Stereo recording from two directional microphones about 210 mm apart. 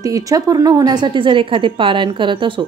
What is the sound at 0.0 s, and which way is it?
A woman's voice, 15° right (ahead or behind).